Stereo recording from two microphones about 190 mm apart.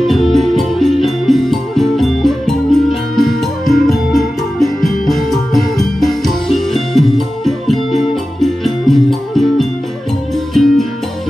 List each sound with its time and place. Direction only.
0.0 s music: centre (ahead or behind)